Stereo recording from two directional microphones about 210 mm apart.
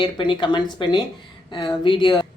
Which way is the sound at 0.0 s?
25° left (ahead or behind).